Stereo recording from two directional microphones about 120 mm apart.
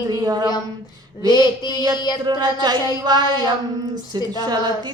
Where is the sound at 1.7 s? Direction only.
30° right (ahead or behind).